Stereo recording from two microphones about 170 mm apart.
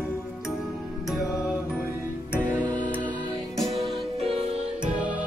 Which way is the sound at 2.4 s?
10° right (ahead or behind).